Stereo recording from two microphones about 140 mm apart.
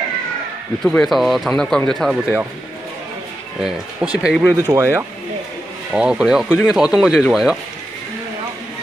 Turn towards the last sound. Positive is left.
turn(degrees=-5)  # may be behind; listen again after turning